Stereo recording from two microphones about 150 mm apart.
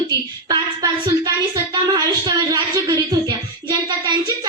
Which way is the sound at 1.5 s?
30° right (ahead or behind).